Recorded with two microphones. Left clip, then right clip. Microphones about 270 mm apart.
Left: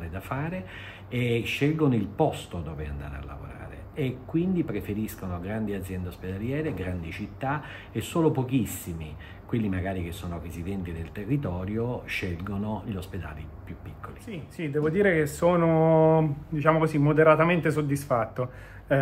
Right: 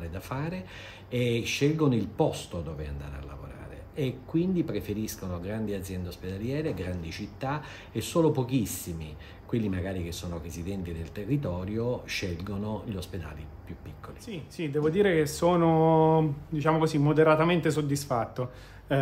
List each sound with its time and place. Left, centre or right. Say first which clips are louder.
0.1 s speech: left 4 dB; centre
14.7 s speech: left 1 dB; centre